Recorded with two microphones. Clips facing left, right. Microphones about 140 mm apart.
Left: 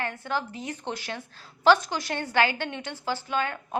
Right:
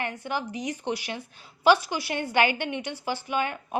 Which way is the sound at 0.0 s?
15° right (ahead or behind).